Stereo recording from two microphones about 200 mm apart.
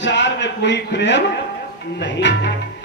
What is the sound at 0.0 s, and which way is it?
Speech, 60° left (ahead or behind).